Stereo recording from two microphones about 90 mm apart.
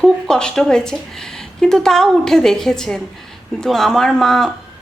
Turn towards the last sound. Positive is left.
turn(degrees=5)  # may be behind; listen again after turning